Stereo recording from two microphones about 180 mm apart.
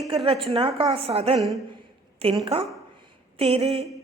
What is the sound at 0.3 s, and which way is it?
A woman's voice, 30° right (ahead or behind).